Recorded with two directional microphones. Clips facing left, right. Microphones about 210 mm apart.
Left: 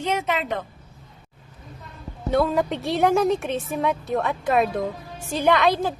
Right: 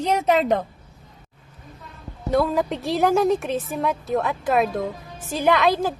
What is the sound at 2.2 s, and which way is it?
A woman's voice, centre (ahead or behind).